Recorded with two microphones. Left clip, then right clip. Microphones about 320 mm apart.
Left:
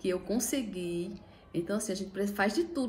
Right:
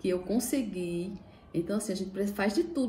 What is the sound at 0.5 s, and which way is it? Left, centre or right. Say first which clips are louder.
A woman's voice: right 2 dB; centre.